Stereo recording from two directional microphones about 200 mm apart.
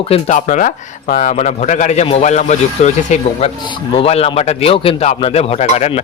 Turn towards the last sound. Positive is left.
turn(degrees=35)  # may be behind; listen again after turning